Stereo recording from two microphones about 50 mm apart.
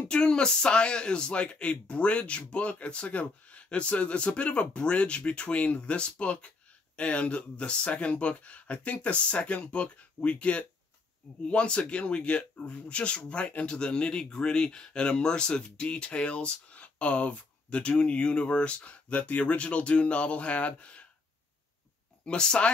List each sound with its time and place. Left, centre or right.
0.1 s speech: centre
22.2 s speech: centre